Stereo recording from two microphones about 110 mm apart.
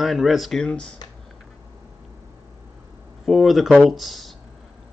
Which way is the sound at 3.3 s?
Centre (ahead or behind).